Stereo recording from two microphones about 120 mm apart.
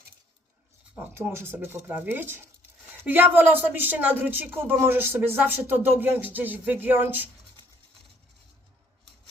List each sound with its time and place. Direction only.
0.9 s speech: 20° right (ahead or behind)